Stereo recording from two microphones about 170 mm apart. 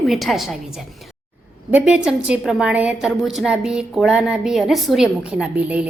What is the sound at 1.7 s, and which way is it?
A woman's voice, 5° right (ahead or behind).